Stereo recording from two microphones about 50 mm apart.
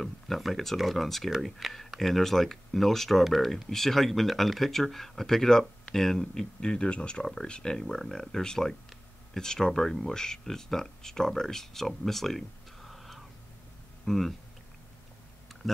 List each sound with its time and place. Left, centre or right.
0.0 s speech: centre